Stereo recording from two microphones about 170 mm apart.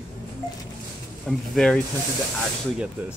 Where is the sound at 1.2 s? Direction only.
5° left (ahead or behind).